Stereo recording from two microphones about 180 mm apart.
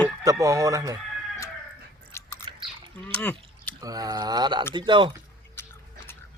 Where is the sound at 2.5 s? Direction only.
30° right (ahead or behind).